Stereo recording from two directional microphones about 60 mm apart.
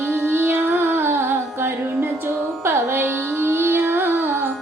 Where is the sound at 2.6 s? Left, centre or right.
Right.